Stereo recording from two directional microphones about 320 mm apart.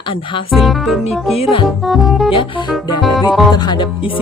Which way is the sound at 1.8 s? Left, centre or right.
Centre.